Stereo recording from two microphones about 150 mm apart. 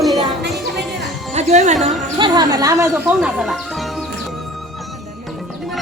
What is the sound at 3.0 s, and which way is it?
Speech, 5° right (ahead or behind).